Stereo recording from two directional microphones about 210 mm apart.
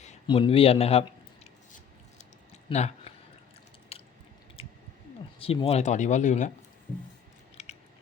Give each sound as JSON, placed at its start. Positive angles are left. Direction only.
{"t": 0.0, "sound": "a man's voice", "side_deg": 30}
{"t": 2.6, "sound": "a sound", "side_deg": 30}
{"t": 3.9, "sound": "chewing", "side_deg": 30}
{"t": 4.6, "sound": "squish", "side_deg": 25}
{"t": 5.4, "sound": "speech", "side_deg": 25}
{"t": 7.5, "sound": "biting", "side_deg": 30}